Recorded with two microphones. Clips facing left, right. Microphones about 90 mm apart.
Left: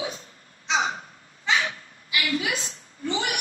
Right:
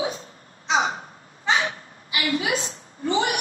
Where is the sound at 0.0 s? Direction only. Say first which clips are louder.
Right 5 dB; 35° right (ahead or behind).